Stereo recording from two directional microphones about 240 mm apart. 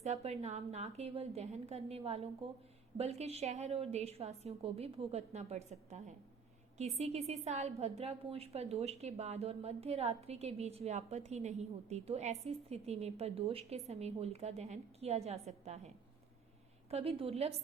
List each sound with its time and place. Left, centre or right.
0.0 s a woman's voice: right
16.9 s a woman's voice: right